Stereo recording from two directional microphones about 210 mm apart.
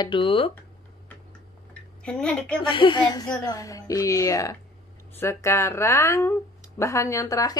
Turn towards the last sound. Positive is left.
turn(degrees=15)  # may be behind; listen again after turning